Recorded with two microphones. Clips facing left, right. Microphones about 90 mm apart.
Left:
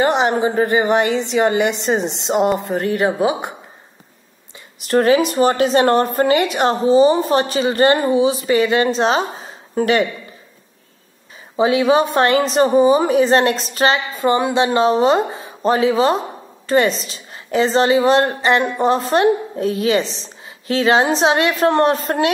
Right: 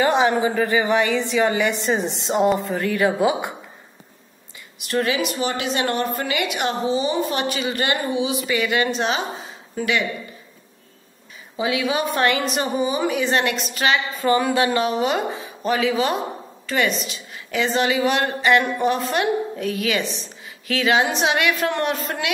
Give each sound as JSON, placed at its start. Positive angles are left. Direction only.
{"t": 0.5, "sound": "a woman's voice", "side_deg": 35}
{"t": 1.6, "sound": "a woman's voice", "side_deg": 70}
{"t": 2.7, "sound": "a woman's voice", "side_deg": 25}
{"t": 4.7, "sound": "a woman's voice", "side_deg": 40}
{"t": 11.5, "sound": "a woman's voice", "side_deg": 30}
{"t": 14.2, "sound": "a woman's voice", "side_deg": 25}